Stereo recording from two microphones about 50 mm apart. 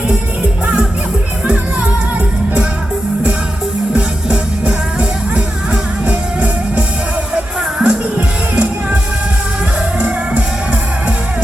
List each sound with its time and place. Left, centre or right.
3.9 s music: right